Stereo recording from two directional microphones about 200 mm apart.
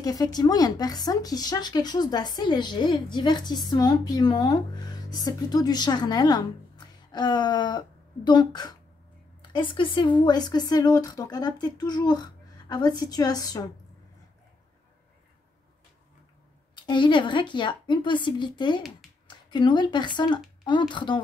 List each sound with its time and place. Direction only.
0.0 s speech: 20° left (ahead or behind)
16.8 s speech: 25° left (ahead or behind)